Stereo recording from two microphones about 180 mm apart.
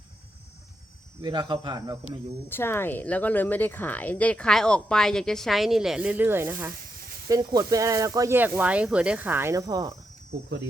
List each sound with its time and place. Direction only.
1.2 s speech: 25° right (ahead or behind)
2.5 s speech: 10° left (ahead or behind); by 9.9 s 20° right (ahead or behind)